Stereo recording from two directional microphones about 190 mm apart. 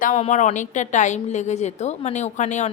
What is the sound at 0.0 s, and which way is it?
A woman's voice, 40° left (ahead or behind).